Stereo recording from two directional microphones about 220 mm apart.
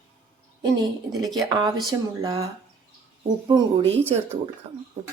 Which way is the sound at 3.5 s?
25° right (ahead or behind).